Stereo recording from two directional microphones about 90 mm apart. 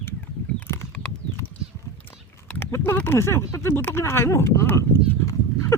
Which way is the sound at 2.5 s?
25° left (ahead or behind).